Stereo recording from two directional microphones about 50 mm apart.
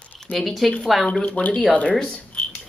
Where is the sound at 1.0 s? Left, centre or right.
Left.